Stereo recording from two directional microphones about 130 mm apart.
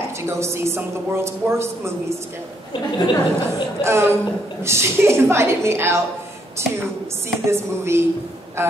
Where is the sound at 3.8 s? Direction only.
20° right (ahead or behind).